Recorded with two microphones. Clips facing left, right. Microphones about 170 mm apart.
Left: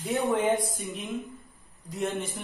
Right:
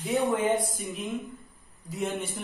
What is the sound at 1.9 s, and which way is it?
Speech, centre (ahead or behind).